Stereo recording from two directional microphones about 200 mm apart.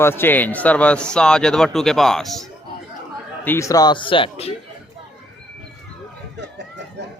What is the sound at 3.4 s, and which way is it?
Speech, 15° left (ahead or behind).